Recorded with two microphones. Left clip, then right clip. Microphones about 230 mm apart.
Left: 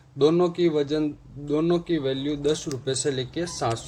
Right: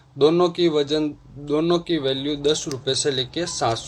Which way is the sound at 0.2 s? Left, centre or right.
Right.